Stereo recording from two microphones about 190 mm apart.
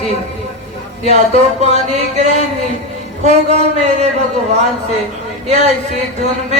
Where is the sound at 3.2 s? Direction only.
40° right (ahead or behind).